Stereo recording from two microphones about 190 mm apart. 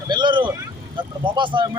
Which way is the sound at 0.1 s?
25° right (ahead or behind).